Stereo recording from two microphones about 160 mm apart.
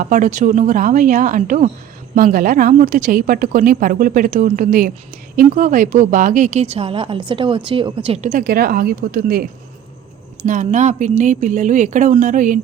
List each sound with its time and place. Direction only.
0.0 s a woman's voice: 55° right (ahead or behind)
10.4 s speech: 50° right (ahead or behind)